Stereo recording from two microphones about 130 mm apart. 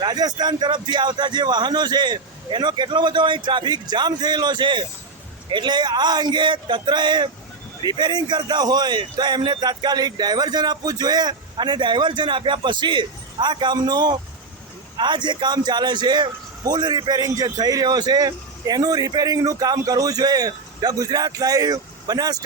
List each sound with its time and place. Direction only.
0.0 s a man's voice: 30° right (ahead or behind)